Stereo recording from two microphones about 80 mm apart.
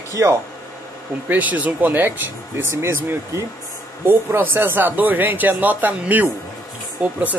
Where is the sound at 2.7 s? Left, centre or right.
Right.